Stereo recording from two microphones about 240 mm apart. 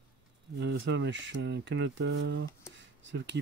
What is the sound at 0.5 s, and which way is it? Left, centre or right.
Speech, right.